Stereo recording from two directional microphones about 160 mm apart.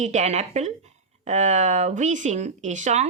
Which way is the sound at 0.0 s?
45° right (ahead or behind).